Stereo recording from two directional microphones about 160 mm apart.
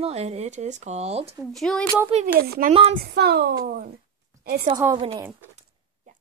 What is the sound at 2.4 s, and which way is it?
Speech, 65° right (ahead or behind).